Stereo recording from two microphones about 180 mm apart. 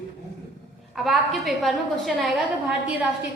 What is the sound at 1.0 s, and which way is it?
A woman's voice, centre (ahead or behind).